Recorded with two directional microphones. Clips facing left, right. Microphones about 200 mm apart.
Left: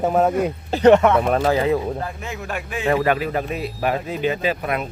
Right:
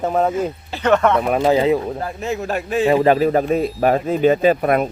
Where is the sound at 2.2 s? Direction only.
35° right (ahead or behind).